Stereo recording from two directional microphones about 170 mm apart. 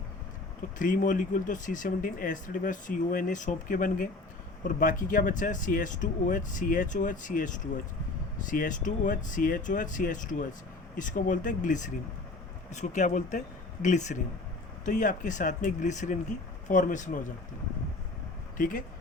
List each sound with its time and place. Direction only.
0.8 s speech: 50° left (ahead or behind)
18.5 s speech: 50° left (ahead or behind)